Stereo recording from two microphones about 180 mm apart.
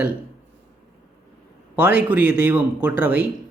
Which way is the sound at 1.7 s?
10° right (ahead or behind).